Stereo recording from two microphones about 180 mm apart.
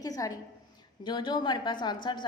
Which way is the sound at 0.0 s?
20° left (ahead or behind).